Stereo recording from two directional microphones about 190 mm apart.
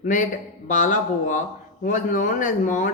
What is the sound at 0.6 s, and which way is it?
A woman's voice, 45° left (ahead or behind).